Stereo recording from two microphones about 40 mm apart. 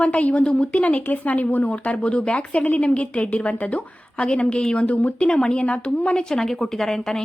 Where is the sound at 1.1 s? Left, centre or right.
Left.